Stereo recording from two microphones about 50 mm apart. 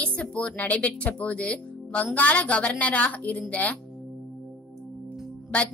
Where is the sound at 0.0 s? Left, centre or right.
Left.